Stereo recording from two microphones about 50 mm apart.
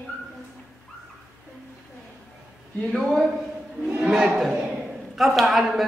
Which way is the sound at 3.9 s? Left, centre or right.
Centre.